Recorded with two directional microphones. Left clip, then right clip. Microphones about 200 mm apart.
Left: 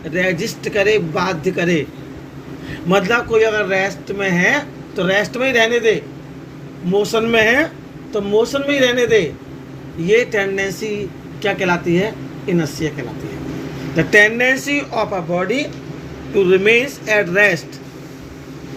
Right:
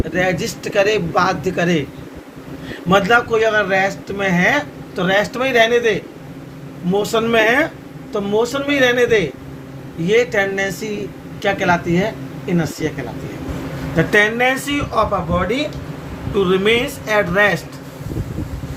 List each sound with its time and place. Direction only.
0.2 s a man's voice: 30° right (ahead or behind)
2.9 s speech: 25° right (ahead or behind)
5.5 s speech: 90° right
6.9 s speech: 25° right (ahead or behind)
13.9 s speech: 15° right (ahead or behind)